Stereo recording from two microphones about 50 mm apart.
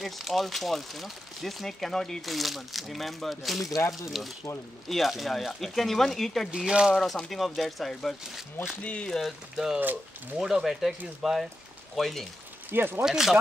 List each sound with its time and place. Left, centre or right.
0.0 s speech: centre
6.5 s speech: centre
7.2 s speech: centre
8.8 s speech: left
9.2 s speech: centre
12.7 s speech: right
13.0 s speech: centre